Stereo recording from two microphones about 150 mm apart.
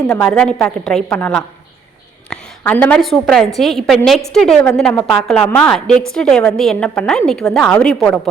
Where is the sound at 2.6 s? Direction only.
10° left (ahead or behind).